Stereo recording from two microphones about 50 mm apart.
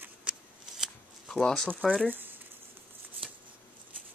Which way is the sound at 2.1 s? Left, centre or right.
Right.